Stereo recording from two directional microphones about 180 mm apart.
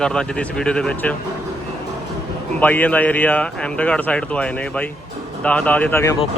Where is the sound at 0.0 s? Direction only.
5° left (ahead or behind).